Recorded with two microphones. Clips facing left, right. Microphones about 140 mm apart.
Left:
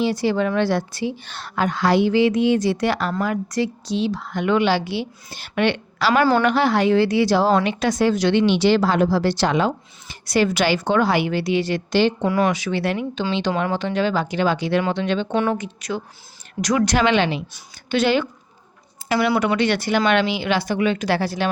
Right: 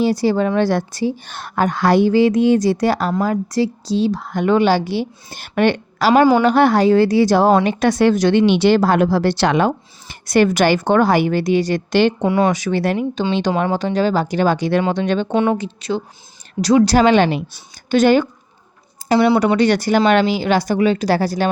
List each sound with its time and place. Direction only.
0.0 s a woman's voice: 40° right (ahead or behind)
7.9 s speech: 65° right (ahead or behind)
8.2 s speech: 45° right (ahead or behind)
12.2 s speech: 25° right (ahead or behind)
12.5 s a woman's voice: 45° right (ahead or behind)
15.3 s a woman's voice: 25° right (ahead or behind); by 18.3 s 45° right (ahead or behind)
19.0 s a woman's voice: 30° right (ahead or behind)